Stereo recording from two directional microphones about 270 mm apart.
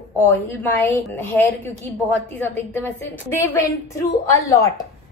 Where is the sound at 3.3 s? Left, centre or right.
Centre.